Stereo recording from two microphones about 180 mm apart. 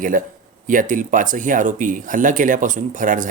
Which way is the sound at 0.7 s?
45° right (ahead or behind).